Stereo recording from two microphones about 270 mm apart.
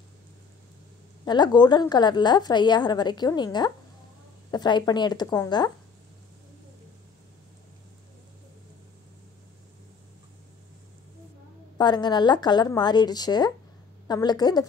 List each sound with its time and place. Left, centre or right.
1.2 s a woman's voice: centre
11.8 s a woman's voice: centre